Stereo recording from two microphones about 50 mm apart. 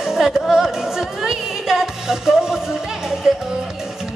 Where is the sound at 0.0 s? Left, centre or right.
Centre.